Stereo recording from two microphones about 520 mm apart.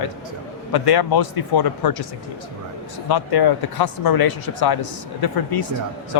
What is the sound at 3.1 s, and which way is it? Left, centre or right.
A man's voice, left.